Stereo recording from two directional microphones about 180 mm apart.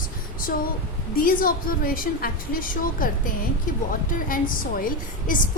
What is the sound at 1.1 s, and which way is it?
A woman's voice, 50° left (ahead or behind).